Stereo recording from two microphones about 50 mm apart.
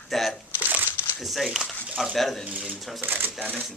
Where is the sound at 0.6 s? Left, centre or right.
Right.